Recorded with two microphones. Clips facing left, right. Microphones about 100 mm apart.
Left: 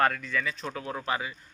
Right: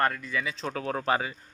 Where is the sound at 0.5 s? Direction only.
30° right (ahead or behind).